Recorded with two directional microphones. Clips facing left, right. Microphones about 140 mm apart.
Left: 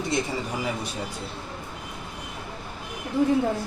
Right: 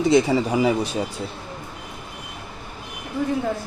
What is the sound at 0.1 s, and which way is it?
Speech, 90° right.